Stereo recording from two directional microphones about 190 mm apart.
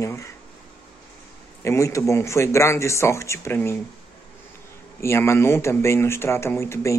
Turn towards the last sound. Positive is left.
turn(degrees=15)  # may be behind; listen again after turning